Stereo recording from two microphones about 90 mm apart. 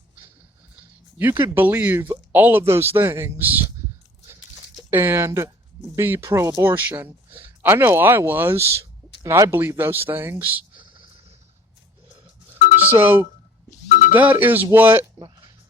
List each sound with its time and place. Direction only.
1.2 s speech: 20° right (ahead or behind)
4.9 s speech: 25° right (ahead or behind)
12.9 s speech: 20° right (ahead or behind)